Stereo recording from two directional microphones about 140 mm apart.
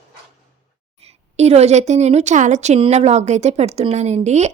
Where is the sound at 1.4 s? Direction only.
50° right (ahead or behind).